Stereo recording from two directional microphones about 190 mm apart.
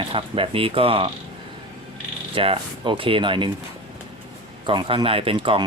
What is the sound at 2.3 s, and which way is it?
Speech, 30° right (ahead or behind).